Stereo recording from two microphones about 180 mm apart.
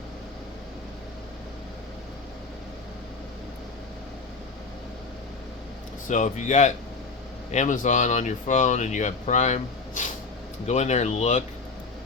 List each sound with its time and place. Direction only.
6.1 s speech: 40° left (ahead or behind)